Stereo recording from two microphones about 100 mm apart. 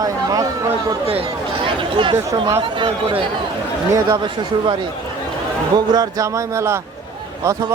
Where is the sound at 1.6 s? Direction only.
55° right (ahead or behind).